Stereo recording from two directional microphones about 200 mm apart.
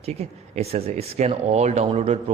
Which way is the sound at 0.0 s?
30° right (ahead or behind).